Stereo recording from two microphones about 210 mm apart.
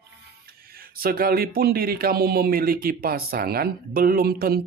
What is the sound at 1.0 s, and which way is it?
Speech, 45° right (ahead or behind).